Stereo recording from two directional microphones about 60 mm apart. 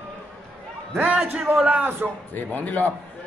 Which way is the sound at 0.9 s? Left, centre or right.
Right.